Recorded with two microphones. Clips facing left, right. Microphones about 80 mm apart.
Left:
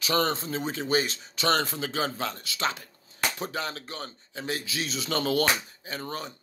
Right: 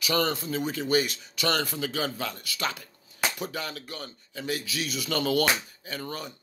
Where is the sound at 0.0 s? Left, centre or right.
Left.